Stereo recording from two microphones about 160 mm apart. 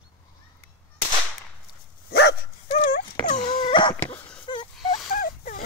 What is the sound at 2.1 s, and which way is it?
Dog, 90° left.